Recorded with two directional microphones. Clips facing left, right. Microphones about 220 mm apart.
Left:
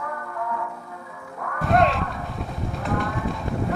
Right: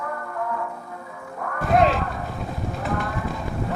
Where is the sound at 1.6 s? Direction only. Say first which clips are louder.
Right 1 dB; centre (ahead or behind).